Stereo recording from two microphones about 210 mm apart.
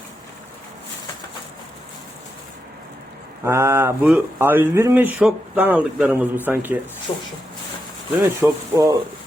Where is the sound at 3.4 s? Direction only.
10° right (ahead or behind).